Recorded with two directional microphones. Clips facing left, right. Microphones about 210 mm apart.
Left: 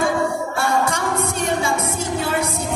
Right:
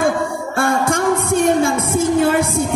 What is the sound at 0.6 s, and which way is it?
Music, 50° right (ahead or behind).